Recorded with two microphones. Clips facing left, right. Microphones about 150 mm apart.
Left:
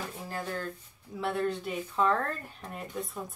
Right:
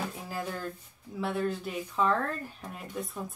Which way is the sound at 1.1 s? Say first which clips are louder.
Even; centre (ahead or behind).